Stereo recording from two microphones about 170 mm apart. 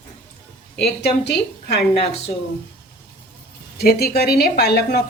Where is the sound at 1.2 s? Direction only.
80° left.